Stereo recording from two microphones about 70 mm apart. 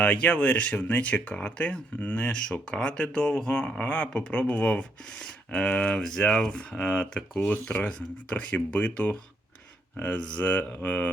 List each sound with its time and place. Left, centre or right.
0.0 s speech: centre